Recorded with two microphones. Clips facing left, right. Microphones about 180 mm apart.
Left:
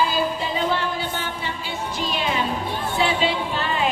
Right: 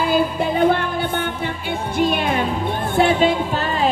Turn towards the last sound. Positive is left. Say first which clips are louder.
# right 3 dB
turn(degrees=-40)  # may be behind; listen again after turning